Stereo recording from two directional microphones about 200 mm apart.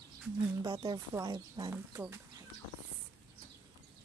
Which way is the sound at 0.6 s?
20° right (ahead or behind).